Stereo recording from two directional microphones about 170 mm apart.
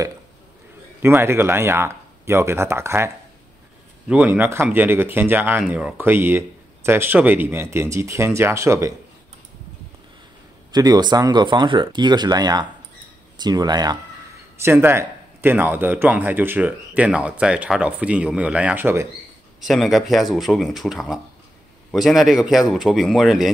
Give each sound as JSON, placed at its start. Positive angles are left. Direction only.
{"t": 1.0, "sound": "speech", "side_deg": -15}
{"t": 4.1, "sound": "speech", "side_deg": -10}
{"t": 10.7, "sound": "speech", "side_deg": -25}
{"t": 14.6, "sound": "speech", "side_deg": -15}
{"t": 19.6, "sound": "speech", "side_deg": 0}